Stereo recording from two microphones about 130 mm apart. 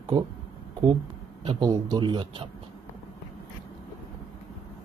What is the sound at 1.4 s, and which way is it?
Speech, 35° right (ahead or behind).